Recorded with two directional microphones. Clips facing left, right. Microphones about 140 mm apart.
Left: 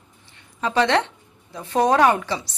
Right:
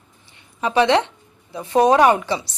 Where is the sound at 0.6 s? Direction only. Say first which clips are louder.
Right 3 dB; 15° right (ahead or behind).